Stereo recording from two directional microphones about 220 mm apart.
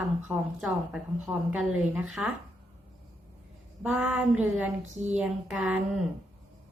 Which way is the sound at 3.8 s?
5° right (ahead or behind).